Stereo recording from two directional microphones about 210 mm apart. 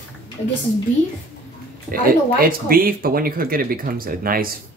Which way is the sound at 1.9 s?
45° right (ahead or behind).